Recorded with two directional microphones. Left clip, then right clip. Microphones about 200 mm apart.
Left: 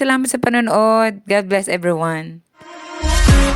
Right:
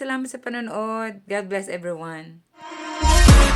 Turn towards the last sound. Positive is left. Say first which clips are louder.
# even
turn(degrees=0)  # may be behind; listen again after turning